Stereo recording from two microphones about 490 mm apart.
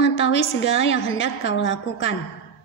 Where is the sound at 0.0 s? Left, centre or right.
Left.